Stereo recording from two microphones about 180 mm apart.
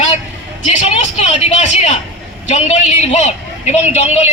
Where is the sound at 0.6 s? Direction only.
40° left (ahead or behind).